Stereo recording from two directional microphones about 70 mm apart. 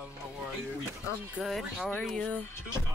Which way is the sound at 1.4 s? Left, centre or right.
Right.